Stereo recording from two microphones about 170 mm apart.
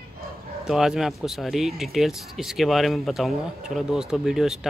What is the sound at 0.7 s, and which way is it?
Speech, centre (ahead or behind).